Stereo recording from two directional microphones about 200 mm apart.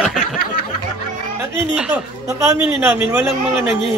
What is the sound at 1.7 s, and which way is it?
A man's voice, 5° right (ahead or behind).